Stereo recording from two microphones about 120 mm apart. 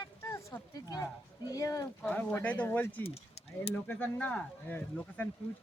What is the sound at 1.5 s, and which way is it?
Speech, 30° left (ahead or behind).